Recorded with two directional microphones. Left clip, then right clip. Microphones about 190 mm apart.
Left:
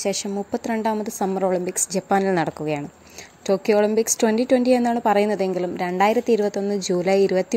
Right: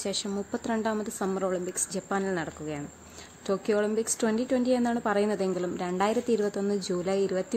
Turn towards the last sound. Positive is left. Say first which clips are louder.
# left 9 dB
turn(degrees=20)  # may be behind; listen again after turning